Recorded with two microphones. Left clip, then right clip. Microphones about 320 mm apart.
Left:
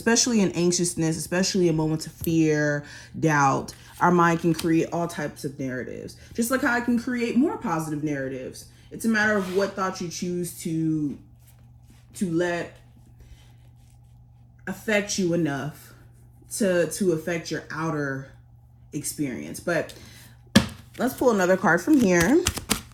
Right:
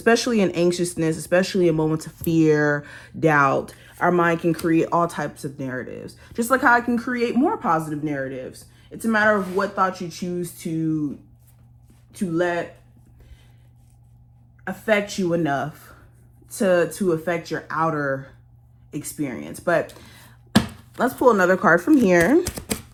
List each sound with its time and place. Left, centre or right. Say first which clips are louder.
0.0 s speech: right 4 dB; centre
12.2 s speech: right 3 dB; centre
14.7 s speech: right 4 dB; centre